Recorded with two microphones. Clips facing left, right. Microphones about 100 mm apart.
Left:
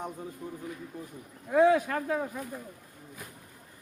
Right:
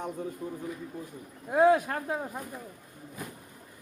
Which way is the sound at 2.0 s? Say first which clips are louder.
Left 2 dB; 25° right (ahead or behind).